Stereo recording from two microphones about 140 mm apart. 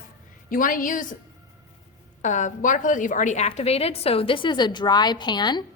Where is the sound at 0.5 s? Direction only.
75° left (ahead or behind).